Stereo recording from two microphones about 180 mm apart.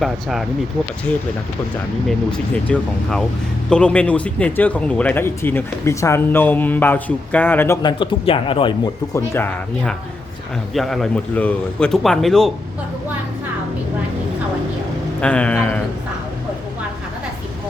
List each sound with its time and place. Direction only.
0.0 s a man's voice: centre (ahead or behind)
2.0 s a man's voice: 5° left (ahead or behind)
7.8 s a man's voice: 25° left (ahead or behind)
9.1 s a man's voice: 10° left (ahead or behind)
15.2 s speech: 5° left (ahead or behind)